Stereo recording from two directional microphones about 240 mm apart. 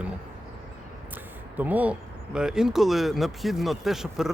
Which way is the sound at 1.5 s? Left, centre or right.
Centre.